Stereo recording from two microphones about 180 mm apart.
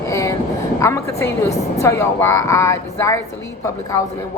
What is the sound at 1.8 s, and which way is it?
A woman's voice, 15° left (ahead or behind).